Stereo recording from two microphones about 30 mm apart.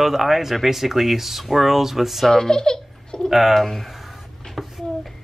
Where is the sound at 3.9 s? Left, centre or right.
Centre.